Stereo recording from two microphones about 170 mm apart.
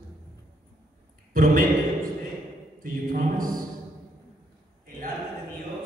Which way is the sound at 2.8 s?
55° right (ahead or behind).